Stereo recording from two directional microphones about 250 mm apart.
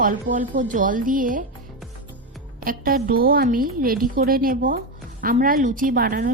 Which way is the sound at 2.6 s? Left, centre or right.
Right.